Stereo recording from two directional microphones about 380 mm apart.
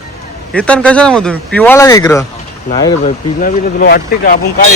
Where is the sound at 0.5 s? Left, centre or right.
Centre; by 4.4 s left.